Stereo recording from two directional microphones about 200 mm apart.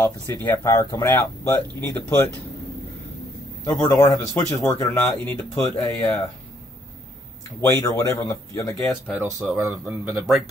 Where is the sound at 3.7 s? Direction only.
15° left (ahead or behind).